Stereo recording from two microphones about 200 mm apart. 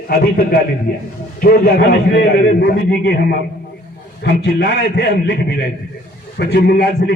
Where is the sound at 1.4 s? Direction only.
50° left (ahead or behind).